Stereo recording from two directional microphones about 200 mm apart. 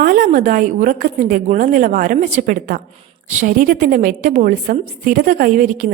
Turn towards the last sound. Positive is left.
turn(degrees=-40)  # may be behind; listen again after turning